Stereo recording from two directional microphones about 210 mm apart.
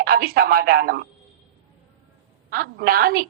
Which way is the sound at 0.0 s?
45° right (ahead or behind).